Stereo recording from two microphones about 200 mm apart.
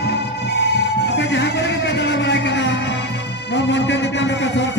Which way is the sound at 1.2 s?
60° left (ahead or behind).